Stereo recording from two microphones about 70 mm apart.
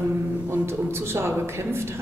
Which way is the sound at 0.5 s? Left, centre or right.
Right.